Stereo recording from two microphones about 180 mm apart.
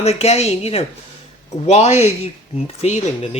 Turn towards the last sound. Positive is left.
turn(degrees=35)  # may be behind; listen again after turning